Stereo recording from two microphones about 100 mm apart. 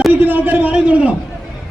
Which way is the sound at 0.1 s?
20° right (ahead or behind).